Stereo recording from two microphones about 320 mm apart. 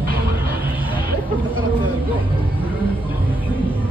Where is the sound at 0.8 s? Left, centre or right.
Centre.